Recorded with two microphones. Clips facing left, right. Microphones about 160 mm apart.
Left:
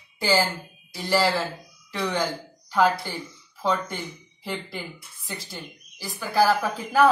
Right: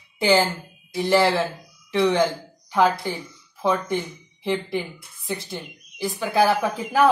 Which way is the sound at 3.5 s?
20° right (ahead or behind).